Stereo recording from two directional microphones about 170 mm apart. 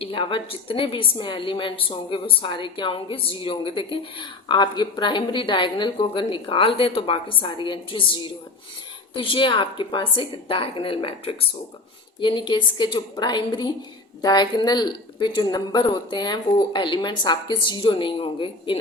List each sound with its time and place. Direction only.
0.0 s a woman's voice: 30° left (ahead or behind)